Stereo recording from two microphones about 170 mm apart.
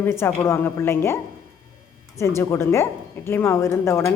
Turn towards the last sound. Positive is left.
turn(degrees=15)  # may be behind; listen again after turning